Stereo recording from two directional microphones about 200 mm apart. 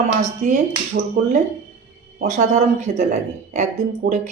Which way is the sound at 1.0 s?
50° right (ahead or behind).